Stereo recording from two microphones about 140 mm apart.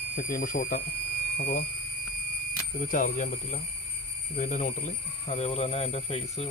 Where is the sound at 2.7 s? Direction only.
80° left; by 6.4 s 45° left (ahead or behind).